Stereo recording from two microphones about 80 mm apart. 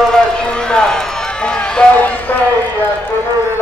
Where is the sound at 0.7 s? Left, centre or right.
Centre.